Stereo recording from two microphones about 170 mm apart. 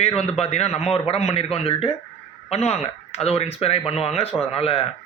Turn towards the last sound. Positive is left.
turn(degrees=35)  # may be behind; listen again after turning